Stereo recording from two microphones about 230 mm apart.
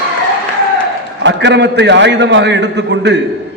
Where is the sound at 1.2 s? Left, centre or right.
Right.